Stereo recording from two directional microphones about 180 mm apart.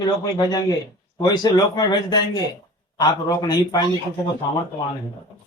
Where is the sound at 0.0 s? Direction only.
20° left (ahead or behind).